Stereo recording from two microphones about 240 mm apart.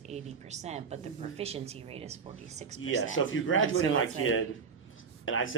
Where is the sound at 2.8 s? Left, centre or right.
Left.